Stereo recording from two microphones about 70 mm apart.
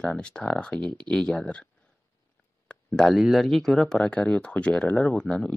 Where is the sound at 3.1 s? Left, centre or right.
Centre.